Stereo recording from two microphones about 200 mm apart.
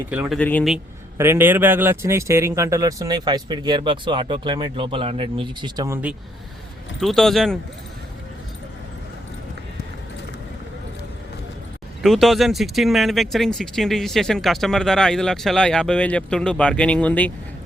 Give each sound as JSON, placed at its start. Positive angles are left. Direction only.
{"t": 0.1, "sound": "speech", "side_deg": -5}
{"t": 0.3, "sound": "speech", "side_deg": 5}
{"t": 1.2, "sound": "speech", "side_deg": -10}
{"t": 7.0, "sound": "speech", "side_deg": 0}
{"t": 12.0, "sound": "speech", "side_deg": 0}